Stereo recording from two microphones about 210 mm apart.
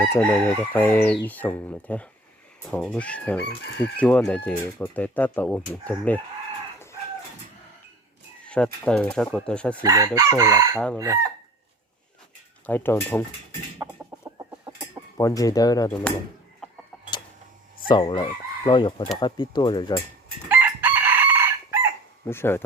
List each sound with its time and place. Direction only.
0.1 s speech: 10° left (ahead or behind)
3.5 s chicken: 50° left (ahead or behind)
4.0 s speech: 5° left (ahead or behind)
8.4 s speech: 5° left (ahead or behind)
9.8 s chicken: 15° right (ahead or behind)
10.8 s speech: 5° left (ahead or behind)
12.6 s speech: 10° left (ahead or behind)
13.8 s chicken: 15° right (ahead or behind)
15.2 s speech: 15° left (ahead or behind)
17.8 s chicken: 20° left (ahead or behind)
19.1 s speech: 20° left (ahead or behind)
20.5 s chicken: 10° right (ahead or behind)
22.3 s speech: 10° left (ahead or behind)